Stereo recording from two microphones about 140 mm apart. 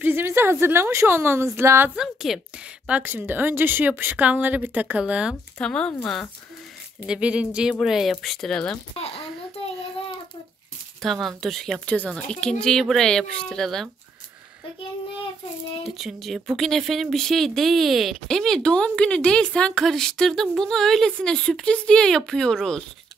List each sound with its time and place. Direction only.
0.0 s a woman's voice: 15° right (ahead or behind)
2.0 s speech: 5° right (ahead or behind)
2.9 s a woman's voice: 15° right (ahead or behind)
5.3 s speech: 5° left (ahead or behind)
7.1 s a woman's voice: 10° right (ahead or behind)
8.9 s a child's voice: 45° left (ahead or behind)
11.0 s speech: centre (ahead or behind)
16.0 s speech: centre (ahead or behind)